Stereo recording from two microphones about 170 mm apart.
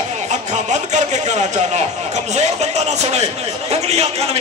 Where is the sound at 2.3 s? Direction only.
40° right (ahead or behind).